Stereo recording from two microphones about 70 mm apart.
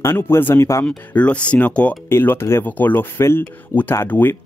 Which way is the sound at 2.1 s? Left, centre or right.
Left.